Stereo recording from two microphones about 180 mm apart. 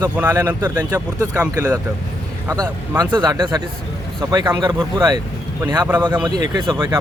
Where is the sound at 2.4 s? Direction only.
20° right (ahead or behind).